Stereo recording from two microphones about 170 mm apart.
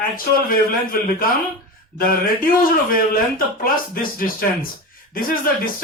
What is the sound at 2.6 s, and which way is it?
A man's voice, 60° left (ahead or behind).